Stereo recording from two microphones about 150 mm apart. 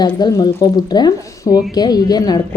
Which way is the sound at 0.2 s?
25° left (ahead or behind).